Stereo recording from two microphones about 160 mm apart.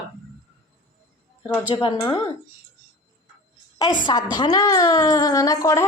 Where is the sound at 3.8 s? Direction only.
25° left (ahead or behind).